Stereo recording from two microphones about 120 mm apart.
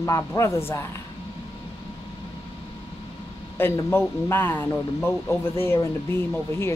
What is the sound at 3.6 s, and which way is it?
Speech, 20° left (ahead or behind).